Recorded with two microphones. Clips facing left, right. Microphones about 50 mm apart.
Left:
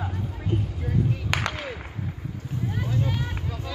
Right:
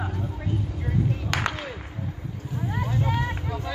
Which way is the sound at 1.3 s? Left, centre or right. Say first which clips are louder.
Right 1 dB; centre.